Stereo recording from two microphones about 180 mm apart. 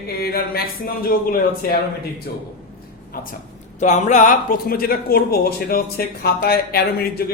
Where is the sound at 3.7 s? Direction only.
40° left (ahead or behind); by 7.3 s 60° left (ahead or behind).